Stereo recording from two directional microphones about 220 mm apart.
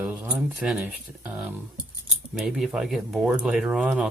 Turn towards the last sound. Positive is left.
turn(degrees=-5)  # may be behind; listen again after turning